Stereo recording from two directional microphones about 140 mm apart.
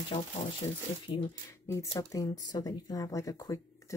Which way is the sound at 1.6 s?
20° left (ahead or behind).